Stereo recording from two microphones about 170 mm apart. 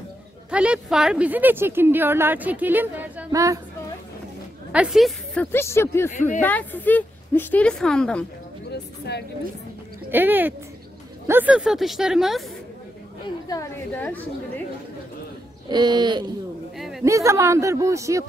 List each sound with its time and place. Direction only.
0.5 s a woman's voice: 5° right (ahead or behind)
4.7 s a woman's voice: centre (ahead or behind)
10.1 s a woman's voice: 10° right (ahead or behind)
13.9 s a woman's voice: 10° left (ahead or behind)
15.7 s speech: 25° right (ahead or behind)
16.7 s a woman's voice: centre (ahead or behind)
17.0 s a woman's voice: 20° right (ahead or behind)